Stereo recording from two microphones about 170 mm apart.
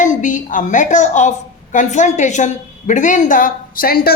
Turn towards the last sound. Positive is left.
turn(degrees=60)  # may be behind; listen again after turning